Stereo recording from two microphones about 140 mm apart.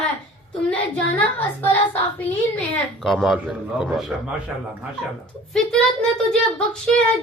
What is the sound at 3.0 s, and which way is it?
A man's voice, centre (ahead or behind).